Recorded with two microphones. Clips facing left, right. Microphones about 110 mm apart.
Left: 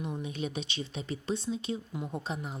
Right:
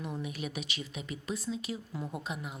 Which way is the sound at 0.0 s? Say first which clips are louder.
Left 2 dB; 20° left (ahead or behind).